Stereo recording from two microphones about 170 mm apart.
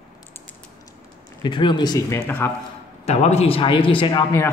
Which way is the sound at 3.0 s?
40° left (ahead or behind).